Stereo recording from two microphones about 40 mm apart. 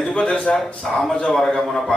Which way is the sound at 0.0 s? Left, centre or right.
Left.